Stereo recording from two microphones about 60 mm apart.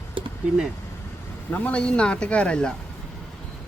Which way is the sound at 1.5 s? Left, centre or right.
Left.